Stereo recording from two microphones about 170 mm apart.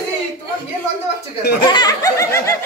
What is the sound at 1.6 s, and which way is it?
Speech, 25° left (ahead or behind).